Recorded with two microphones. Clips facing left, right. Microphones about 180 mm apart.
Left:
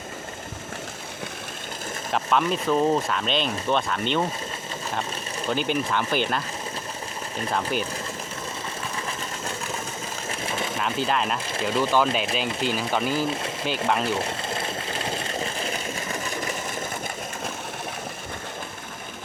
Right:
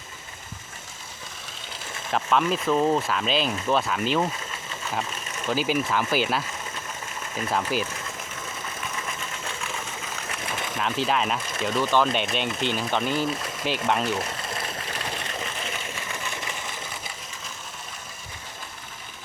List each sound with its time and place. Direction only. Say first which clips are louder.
2.1 s speech: even; centre (ahead or behind)
5.5 s speech: right 1 dB; 5° right (ahead or behind)
7.5 s speech: right 1 dB; centre (ahead or behind)
9.0 s a sound: left 3 dB; 35° left (ahead or behind)
10.8 s speech: right 1 dB; centre (ahead or behind)
11.8 s speech: even; 10° left (ahead or behind)
14.0 s sewing machine: left 1 dB; 30° left (ahead or behind)